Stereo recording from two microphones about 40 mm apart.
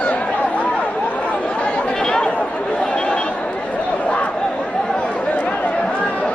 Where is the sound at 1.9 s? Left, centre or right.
Centre.